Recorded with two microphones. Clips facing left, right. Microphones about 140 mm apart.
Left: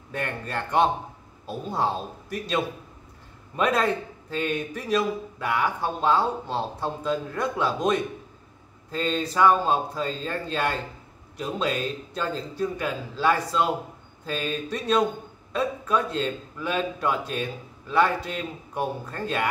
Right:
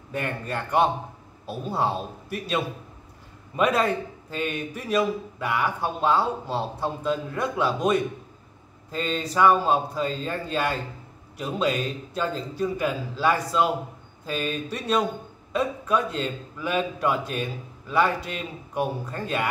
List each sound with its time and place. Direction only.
0.1 s a man's voice: 10° right (ahead or behind)